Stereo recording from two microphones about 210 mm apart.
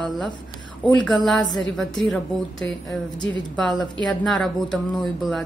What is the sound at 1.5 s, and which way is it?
A woman's voice, centre (ahead or behind).